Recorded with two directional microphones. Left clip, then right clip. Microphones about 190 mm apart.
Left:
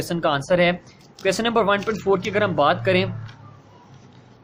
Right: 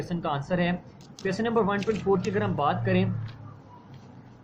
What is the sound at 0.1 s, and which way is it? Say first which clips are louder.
Speech: left 10 dB; 50° left (ahead or behind).